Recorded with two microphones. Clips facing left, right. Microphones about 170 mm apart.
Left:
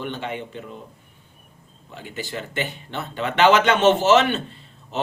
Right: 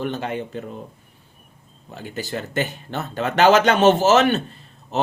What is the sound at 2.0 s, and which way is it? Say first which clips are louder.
Speech: right 3 dB; 45° right (ahead or behind).